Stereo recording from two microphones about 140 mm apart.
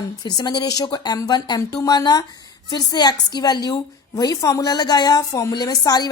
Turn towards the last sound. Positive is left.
turn(degrees=30)  # may be behind; listen again after turning